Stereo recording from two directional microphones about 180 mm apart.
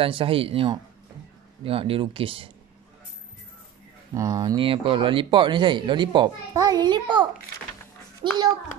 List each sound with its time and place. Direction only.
0.0 s speech: 30° right (ahead or behind)
4.1 s speech: 20° right (ahead or behind)